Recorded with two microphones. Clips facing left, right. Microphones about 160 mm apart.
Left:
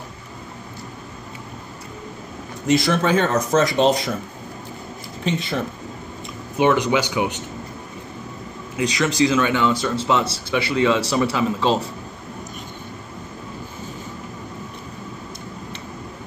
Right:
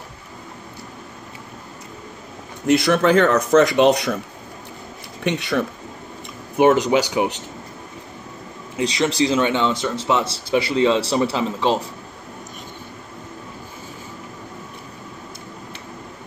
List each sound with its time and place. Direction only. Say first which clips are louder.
2.6 s speech: right 2 dB; 60° right (ahead or behind)
5.2 s speech: right 2 dB; 70° right (ahead or behind)
6.5 s speech: right 3 dB; 50° right (ahead or behind)
8.7 s speech: even; 30° right (ahead or behind)
10.5 s speech: right 2 dB; 35° right (ahead or behind)